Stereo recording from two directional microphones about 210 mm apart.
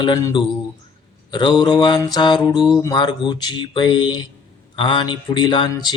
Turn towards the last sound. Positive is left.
turn(degrees=20)  # may be behind; listen again after turning